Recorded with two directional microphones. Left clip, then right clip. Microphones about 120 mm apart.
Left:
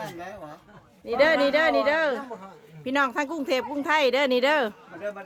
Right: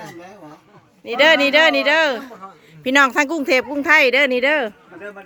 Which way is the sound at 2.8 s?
75° right (ahead or behind).